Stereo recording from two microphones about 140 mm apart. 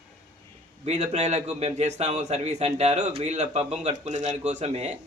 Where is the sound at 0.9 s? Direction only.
55° right (ahead or behind).